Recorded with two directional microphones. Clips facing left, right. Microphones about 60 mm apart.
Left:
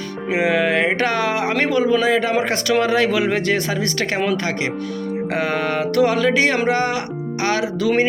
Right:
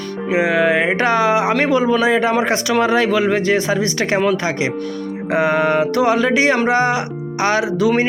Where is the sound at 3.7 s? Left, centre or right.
Centre.